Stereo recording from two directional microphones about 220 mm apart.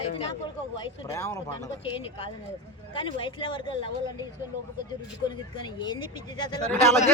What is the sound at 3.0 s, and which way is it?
Speech, 25° left (ahead or behind).